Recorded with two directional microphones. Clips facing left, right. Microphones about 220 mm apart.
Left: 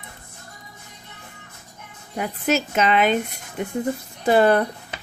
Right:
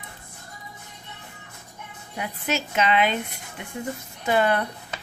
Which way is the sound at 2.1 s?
45° left (ahead or behind).